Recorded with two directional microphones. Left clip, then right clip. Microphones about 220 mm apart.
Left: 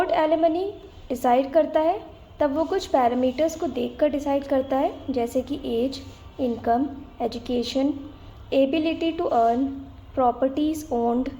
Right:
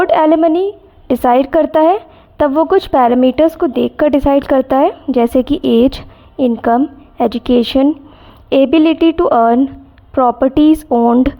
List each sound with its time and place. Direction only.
0.0 s a woman's voice: 45° right (ahead or behind)